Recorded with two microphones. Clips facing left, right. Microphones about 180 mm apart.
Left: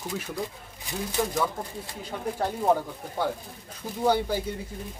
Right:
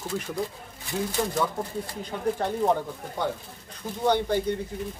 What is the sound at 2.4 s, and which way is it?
Speech, 5° left (ahead or behind).